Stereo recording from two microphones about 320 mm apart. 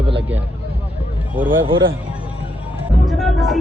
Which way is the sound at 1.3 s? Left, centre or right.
Centre.